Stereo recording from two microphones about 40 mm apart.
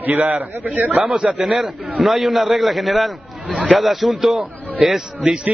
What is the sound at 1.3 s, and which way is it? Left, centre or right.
A man's voice, centre.